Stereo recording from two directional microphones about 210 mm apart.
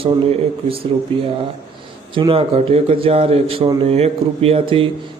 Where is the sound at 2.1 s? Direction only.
25° right (ahead or behind).